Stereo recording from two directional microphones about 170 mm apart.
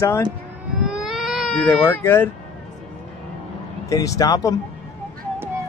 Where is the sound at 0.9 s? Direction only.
Centre (ahead or behind); by 2.3 s 15° left (ahead or behind).